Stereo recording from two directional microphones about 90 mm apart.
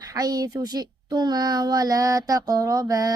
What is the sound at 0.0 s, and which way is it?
Speech, 45° right (ahead or behind).